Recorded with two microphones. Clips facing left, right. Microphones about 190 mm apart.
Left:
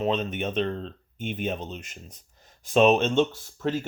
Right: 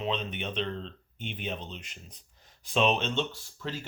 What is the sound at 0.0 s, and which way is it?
Speech, 45° left (ahead or behind).